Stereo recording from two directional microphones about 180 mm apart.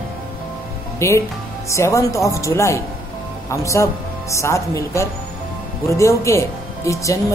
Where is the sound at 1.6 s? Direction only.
15° left (ahead or behind).